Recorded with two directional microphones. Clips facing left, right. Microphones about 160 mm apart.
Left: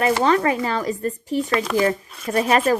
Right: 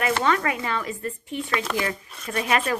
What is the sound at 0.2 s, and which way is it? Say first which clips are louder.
Speech: left 5 dB; 30° left (ahead or behind).